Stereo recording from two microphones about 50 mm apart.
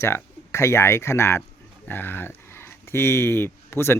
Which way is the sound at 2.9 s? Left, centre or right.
Left.